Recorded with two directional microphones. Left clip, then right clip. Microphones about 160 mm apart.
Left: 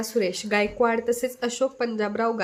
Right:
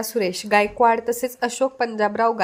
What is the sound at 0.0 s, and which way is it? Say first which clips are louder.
A woman's voice: right 2 dB; 25° right (ahead or behind).